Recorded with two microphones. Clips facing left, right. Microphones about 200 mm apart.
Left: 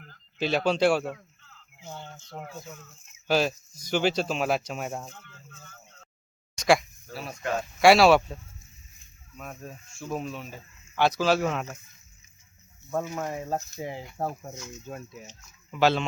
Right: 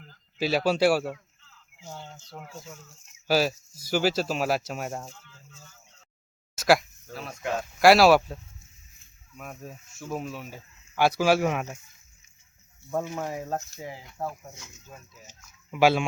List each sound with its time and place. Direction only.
0.1 s a man's voice: 5° right (ahead or behind)
3.2 s speech: 5° right (ahead or behind)
5.1 s a sound: 60° left (ahead or behind)
6.6 s a sound: centre (ahead or behind)
7.3 s speech: 5° right (ahead or behind)
9.4 s speech: 5° right (ahead or behind)
13.1 s speech: centre (ahead or behind)
13.8 s speech: 25° left (ahead or behind)
14.8 s speech: 65° left (ahead or behind)
15.7 s speech: 10° right (ahead or behind)